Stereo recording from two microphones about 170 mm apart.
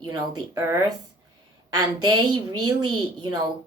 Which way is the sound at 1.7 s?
25° right (ahead or behind).